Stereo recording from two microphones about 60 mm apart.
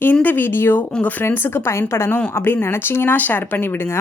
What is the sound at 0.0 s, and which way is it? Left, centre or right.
Speech, left.